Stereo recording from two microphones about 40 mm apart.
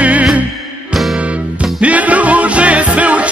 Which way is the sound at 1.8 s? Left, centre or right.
Right.